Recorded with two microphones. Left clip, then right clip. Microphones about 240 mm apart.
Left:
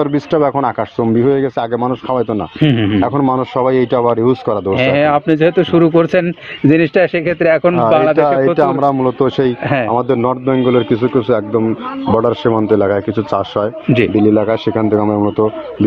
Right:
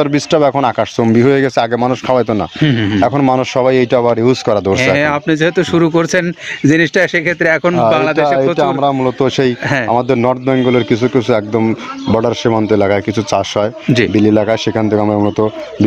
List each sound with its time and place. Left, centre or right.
0.0 s speech: right
2.6 s speech: right
3.0 s a man's voice: right
4.7 s speech: right
9.7 s speech: right
9.9 s a man's voice: right